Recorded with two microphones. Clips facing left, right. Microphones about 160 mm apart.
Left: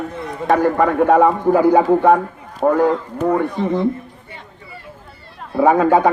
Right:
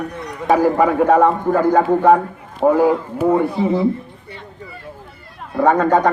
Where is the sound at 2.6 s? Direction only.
5° right (ahead or behind).